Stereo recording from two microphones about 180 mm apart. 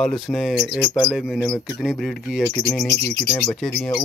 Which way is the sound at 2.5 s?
10° left (ahead or behind).